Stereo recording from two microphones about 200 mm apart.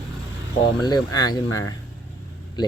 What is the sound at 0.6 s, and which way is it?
Speech, 20° left (ahead or behind).